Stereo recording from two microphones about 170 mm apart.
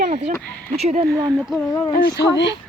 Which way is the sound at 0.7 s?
40° right (ahead or behind).